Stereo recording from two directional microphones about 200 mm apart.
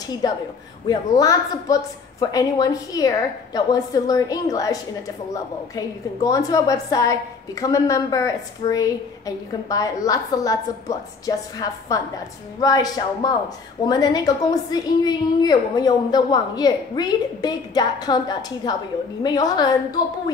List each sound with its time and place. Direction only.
0.2 s a woman's voice: 20° left (ahead or behind)